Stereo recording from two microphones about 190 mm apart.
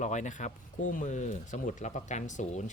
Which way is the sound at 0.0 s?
40° left (ahead or behind).